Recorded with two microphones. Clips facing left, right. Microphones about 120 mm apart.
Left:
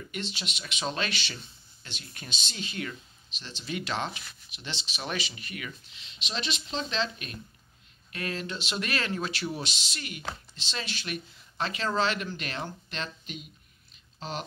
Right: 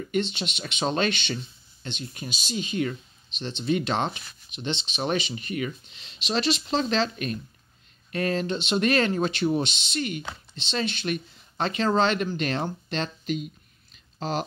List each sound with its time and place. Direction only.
0.1 s speech: 25° right (ahead or behind)
1.9 s speech: 20° right (ahead or behind)
2.8 s speech: 30° right (ahead or behind)
6.2 s speech: 60° right (ahead or behind)
6.7 s speech: 50° right (ahead or behind)
8.1 s speech: 35° right (ahead or behind)